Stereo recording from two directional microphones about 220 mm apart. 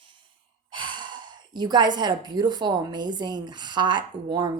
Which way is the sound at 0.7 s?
20° right (ahead or behind).